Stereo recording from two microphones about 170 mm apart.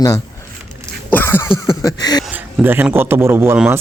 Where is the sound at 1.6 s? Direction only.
25° left (ahead or behind).